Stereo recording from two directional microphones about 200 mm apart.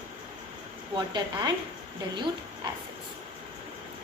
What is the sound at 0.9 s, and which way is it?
Speech, 20° right (ahead or behind).